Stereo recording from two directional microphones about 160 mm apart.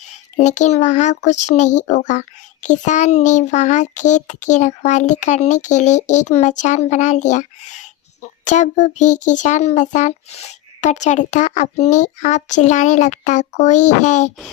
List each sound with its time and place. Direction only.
0.1 s speech: 45° left (ahead or behind)